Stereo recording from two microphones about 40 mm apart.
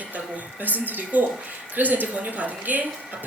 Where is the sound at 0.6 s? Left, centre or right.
Right.